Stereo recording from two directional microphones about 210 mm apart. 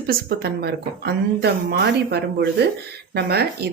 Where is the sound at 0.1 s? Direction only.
50° right (ahead or behind).